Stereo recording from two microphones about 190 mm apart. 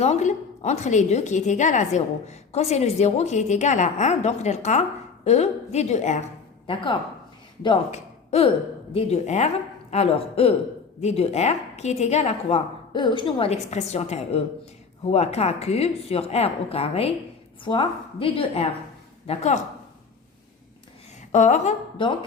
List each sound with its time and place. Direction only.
0.0 s a woman's voice: 35° left (ahead or behind)
7.9 s a woman's voice: 35° left (ahead or behind)
21.3 s a woman's voice: 40° left (ahead or behind)
22.0 s a woman's voice: 25° left (ahead or behind)